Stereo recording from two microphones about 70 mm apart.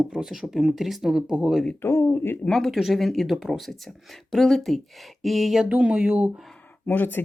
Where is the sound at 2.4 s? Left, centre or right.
Centre.